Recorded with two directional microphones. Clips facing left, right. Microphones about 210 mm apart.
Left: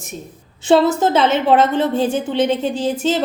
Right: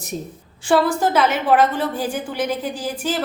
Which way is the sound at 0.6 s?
25° left (ahead or behind).